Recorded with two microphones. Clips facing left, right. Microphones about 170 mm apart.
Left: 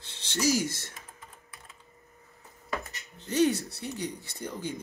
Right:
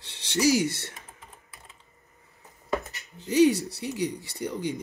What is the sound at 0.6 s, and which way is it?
Speech, 65° right (ahead or behind).